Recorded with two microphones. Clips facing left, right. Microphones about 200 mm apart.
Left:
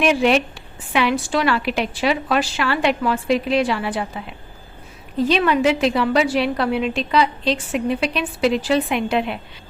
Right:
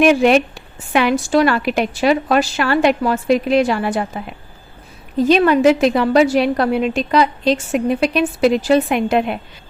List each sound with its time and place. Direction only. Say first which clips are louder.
0.0 s a woman's voice: right 5 dB; 45° right (ahead or behind)
5.2 s a woman's voice: right 5 dB; 45° right (ahead or behind)